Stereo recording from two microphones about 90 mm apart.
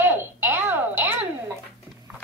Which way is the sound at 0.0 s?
25° right (ahead or behind).